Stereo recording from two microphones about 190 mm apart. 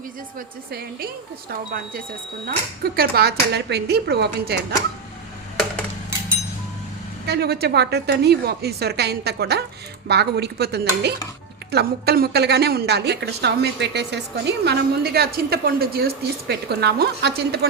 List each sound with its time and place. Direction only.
0.3 s a woman's voice: 55° right (ahead or behind)
7.3 s a woman's voice: 60° right (ahead or behind)